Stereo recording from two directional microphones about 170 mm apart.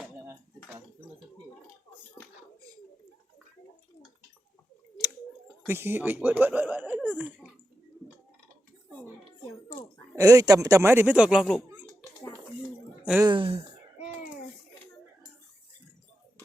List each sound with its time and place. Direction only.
5.6 s speech: 15° right (ahead or behind)
10.2 s speech: 20° right (ahead or behind); by 11.6 s centre (ahead or behind)
13.2 s speech: 30° right (ahead or behind)